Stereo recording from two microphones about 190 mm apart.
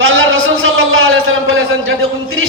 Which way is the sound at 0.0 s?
90° right.